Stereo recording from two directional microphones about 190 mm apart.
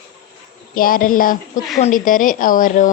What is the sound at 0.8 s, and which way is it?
Speech, 50° left (ahead or behind).